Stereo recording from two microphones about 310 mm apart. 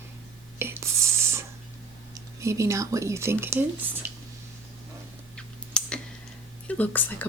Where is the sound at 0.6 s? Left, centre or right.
Centre.